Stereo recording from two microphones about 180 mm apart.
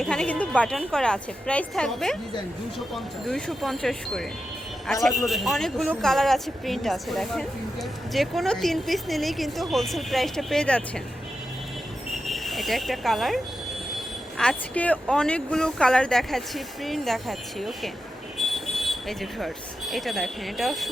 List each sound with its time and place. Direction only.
0.0 s a woman's voice: 5° left (ahead or behind)
12.2 s a woman's voice: centre (ahead or behind)
18.3 s vehicle: centre (ahead or behind)
19.9 s a woman's voice: centre (ahead or behind)